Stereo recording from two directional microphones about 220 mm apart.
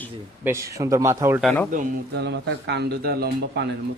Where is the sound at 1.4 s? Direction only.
Centre (ahead or behind).